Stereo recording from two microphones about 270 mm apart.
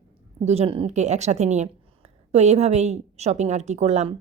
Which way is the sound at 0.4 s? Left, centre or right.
Right.